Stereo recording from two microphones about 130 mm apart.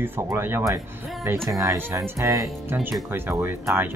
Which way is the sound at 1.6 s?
20° right (ahead or behind).